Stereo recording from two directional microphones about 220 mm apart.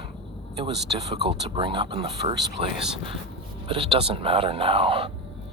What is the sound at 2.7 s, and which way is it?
Speech, 5° right (ahead or behind).